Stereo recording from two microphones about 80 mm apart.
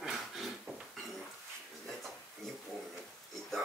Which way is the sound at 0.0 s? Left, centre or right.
Centre.